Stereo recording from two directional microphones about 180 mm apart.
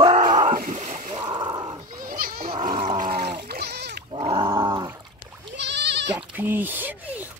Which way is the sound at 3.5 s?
60° right (ahead or behind).